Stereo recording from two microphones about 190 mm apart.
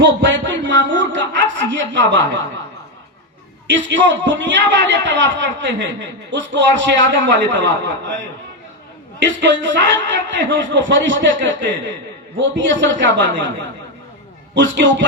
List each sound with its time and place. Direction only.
0.0 s a man's voice: 70° right (ahead or behind)
3.7 s a man's voice: 70° right (ahead or behind)
14.5 s a man's voice: 70° right (ahead or behind)